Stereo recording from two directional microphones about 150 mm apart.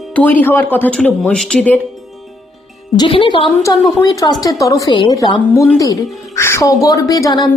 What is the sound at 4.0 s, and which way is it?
Speech, 25° left (ahead or behind).